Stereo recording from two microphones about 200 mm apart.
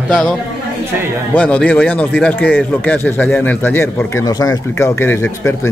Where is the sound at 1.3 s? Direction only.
10° left (ahead or behind).